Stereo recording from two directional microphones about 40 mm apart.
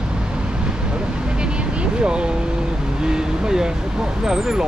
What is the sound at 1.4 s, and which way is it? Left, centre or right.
Vehicle, right.